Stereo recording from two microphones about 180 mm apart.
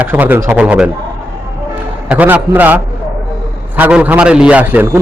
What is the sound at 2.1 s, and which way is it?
A man's voice, 10° right (ahead or behind).